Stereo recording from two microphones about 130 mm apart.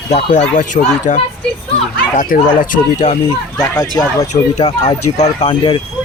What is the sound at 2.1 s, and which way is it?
Speech, 90° left.